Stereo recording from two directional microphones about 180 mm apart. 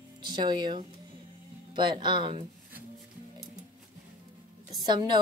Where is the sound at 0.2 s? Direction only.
25° right (ahead or behind).